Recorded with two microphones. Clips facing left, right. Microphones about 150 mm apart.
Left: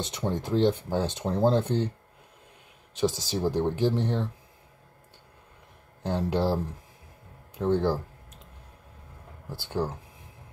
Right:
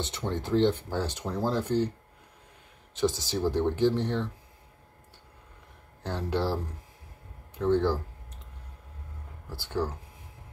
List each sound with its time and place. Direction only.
0.0 s speech: 15° left (ahead or behind)
3.0 s speech: 15° left (ahead or behind)
6.0 s speech: 15° left (ahead or behind)
9.6 s speech: 15° left (ahead or behind)